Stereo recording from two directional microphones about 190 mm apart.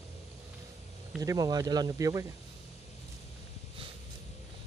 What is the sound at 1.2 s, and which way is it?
Speech, 20° right (ahead or behind).